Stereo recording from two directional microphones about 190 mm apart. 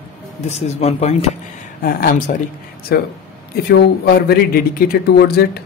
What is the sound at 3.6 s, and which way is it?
Speech, 55° left (ahead or behind).